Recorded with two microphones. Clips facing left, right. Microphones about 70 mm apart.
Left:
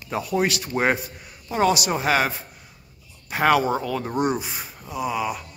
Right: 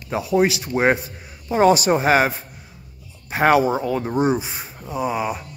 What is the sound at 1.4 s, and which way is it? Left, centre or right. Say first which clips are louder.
Speech: right 6 dB; right.